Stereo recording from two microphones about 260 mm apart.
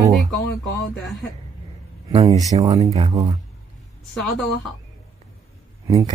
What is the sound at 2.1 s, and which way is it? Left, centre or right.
Speech, right.